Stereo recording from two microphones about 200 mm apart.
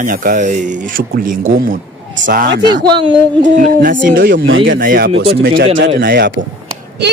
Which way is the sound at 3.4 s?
40° right (ahead or behind).